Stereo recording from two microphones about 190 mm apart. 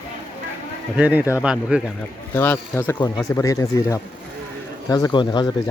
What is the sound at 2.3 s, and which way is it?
Speech, 10° left (ahead or behind).